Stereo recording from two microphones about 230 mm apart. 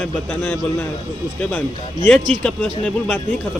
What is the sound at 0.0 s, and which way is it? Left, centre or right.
A man's voice, centre.